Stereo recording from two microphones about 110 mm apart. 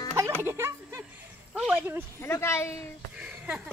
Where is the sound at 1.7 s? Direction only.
20° right (ahead or behind).